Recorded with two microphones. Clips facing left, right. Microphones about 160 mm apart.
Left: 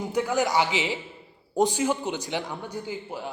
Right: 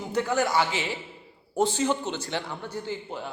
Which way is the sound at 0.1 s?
10° left (ahead or behind).